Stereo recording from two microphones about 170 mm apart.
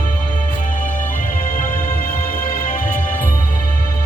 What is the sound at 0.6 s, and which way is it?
Music, 50° left (ahead or behind).